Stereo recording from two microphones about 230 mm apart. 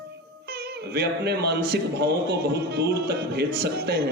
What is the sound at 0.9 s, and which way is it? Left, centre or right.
A man's voice, right.